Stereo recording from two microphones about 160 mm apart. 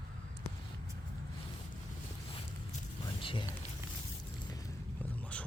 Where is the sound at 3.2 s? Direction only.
30° left (ahead or behind).